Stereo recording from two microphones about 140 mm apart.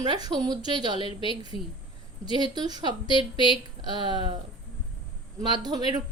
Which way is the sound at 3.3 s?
35° left (ahead or behind).